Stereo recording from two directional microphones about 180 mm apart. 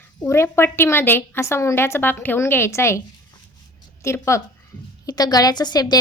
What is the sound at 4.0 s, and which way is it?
A woman's voice, 15° left (ahead or behind).